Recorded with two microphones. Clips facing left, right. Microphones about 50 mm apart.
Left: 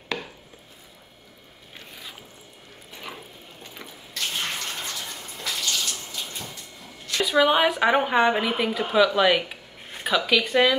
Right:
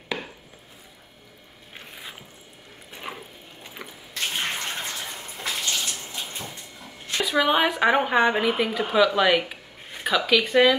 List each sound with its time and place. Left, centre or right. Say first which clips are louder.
1.7 s a sound: right 2 dB; right
3.7 s bathtub: right 1 dB; right
7.2 s a woman's voice: left 2 dB; centre